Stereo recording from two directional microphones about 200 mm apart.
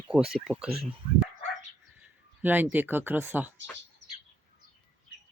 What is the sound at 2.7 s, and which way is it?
Speech, 10° right (ahead or behind).